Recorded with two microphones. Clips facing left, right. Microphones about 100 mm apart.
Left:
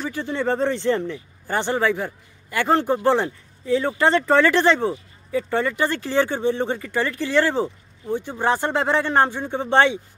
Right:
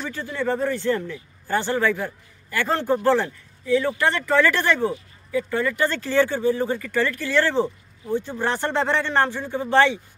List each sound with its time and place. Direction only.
0.0 s speech: 15° left (ahead or behind)
0.3 s speech: 25° left (ahead or behind)